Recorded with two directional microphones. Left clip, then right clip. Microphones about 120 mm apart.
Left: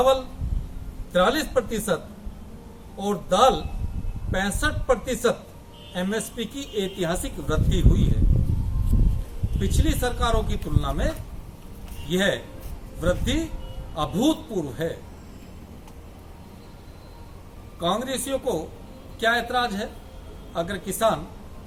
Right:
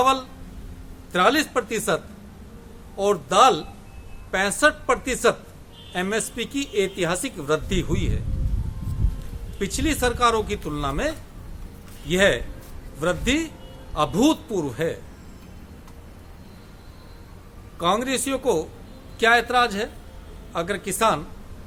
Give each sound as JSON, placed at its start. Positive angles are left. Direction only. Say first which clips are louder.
{"t": 1.1, "sound": "speech", "louder": "right 1 dB", "side_deg": -20}
{"t": 3.0, "sound": "speech", "louder": "right 3 dB", "side_deg": -20}
{"t": 9.6, "sound": "speech", "louder": "right 3 dB", "side_deg": -25}
{"t": 17.7, "sound": "speech", "louder": "right 3 dB", "side_deg": -20}